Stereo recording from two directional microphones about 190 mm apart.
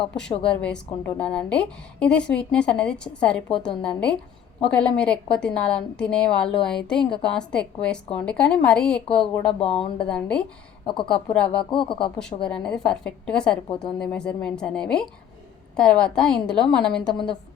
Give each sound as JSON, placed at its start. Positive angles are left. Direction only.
{"t": 0.2, "sound": "a woman's voice", "side_deg": 5}
{"t": 9.6, "sound": "speech", "side_deg": 30}
{"t": 10.1, "sound": "a woman's voice", "side_deg": 5}
{"t": 10.8, "sound": "speech", "side_deg": 25}
{"t": 12.5, "sound": "a woman's voice", "side_deg": 5}